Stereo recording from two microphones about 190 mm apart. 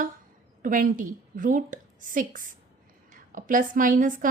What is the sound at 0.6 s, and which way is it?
Speech, 45° right (ahead or behind).